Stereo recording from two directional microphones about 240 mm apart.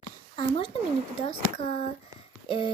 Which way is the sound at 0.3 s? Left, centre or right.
Left.